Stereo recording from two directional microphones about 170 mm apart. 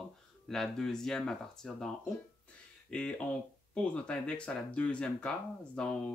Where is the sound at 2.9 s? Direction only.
5° left (ahead or behind).